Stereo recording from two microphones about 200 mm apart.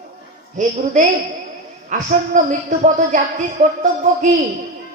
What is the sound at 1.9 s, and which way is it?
A woman's voice, 35° right (ahead or behind).